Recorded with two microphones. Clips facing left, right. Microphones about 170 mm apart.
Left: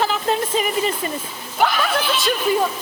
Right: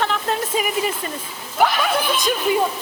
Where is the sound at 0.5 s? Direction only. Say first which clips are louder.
Left 1 dB; 10° right (ahead or behind).